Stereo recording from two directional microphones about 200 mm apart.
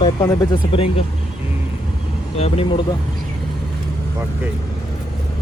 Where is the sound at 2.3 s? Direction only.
30° left (ahead or behind).